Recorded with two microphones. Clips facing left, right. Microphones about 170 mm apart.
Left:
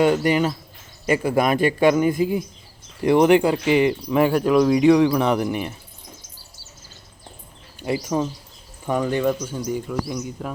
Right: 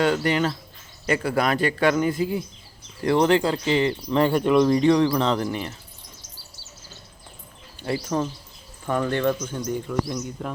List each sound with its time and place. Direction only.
0.0 s speech: 10° left (ahead or behind)
7.8 s speech: 15° left (ahead or behind)